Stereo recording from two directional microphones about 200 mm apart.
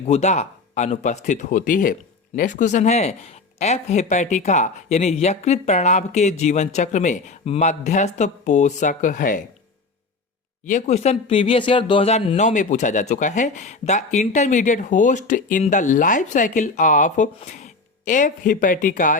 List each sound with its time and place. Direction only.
0.1 s speech: 35° left (ahead or behind)
10.7 s speech: 35° left (ahead or behind)